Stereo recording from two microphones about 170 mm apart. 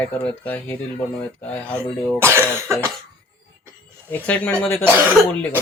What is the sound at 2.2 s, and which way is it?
Speech, 15° right (ahead or behind).